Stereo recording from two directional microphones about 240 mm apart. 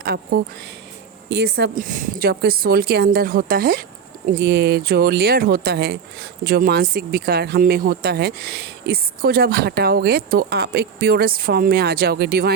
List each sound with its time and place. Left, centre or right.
0.0 s speech: right